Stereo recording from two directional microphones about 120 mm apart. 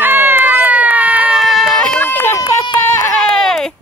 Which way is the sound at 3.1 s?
5° left (ahead or behind).